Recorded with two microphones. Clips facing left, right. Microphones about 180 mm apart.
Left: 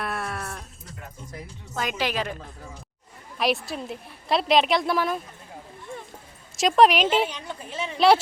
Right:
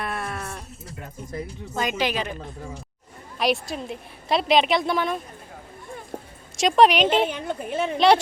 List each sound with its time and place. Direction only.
0.0 s sheep: centre (ahead or behind)
1.8 s a woman's voice: centre (ahead or behind)
6.6 s a woman's voice: centre (ahead or behind)
7.3 s a woman's voice: 55° right (ahead or behind)
7.9 s a woman's voice: 5° left (ahead or behind)